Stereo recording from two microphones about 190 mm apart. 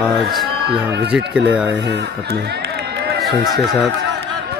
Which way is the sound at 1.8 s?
65° right (ahead or behind).